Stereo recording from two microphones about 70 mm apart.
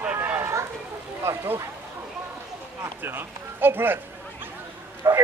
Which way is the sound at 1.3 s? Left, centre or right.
Right.